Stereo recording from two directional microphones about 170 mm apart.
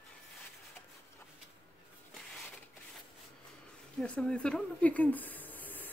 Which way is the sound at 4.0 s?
5° left (ahead or behind).